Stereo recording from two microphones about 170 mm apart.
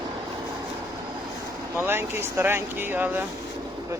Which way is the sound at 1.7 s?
15° right (ahead or behind).